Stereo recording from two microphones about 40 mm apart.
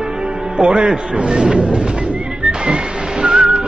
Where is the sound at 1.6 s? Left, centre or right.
Right.